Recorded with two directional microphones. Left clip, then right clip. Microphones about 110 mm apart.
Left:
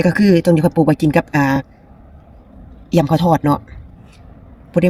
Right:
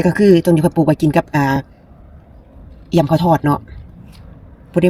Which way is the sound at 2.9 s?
40° left (ahead or behind).